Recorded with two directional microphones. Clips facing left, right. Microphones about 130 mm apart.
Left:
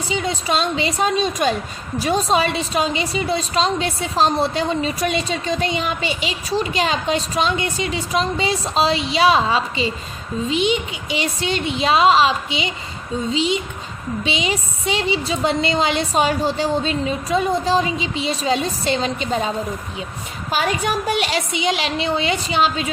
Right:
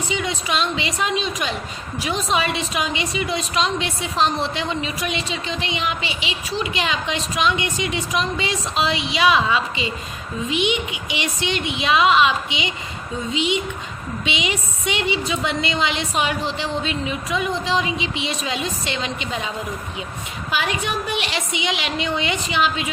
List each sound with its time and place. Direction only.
0.1 s a woman's voice: 35° left (ahead or behind)